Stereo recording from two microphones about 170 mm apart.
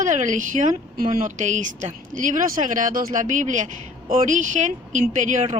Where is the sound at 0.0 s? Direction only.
45° right (ahead or behind).